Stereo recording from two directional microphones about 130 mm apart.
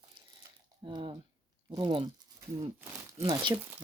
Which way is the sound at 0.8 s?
35° right (ahead or behind).